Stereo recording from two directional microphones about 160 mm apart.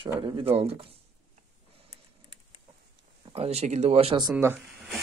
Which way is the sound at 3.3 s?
40° right (ahead or behind).